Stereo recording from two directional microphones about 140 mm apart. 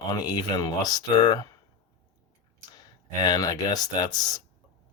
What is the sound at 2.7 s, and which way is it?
Speech, 25° left (ahead or behind).